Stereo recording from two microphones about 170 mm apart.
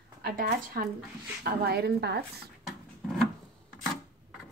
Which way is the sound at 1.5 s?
70° right (ahead or behind).